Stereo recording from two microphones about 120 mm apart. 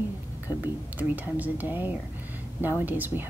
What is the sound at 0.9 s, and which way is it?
Speech, 15° right (ahead or behind).